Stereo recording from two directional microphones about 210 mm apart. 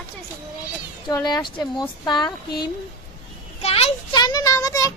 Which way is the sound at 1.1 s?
20° left (ahead or behind).